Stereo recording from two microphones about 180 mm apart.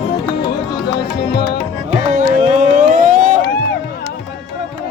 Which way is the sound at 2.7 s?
45° right (ahead or behind).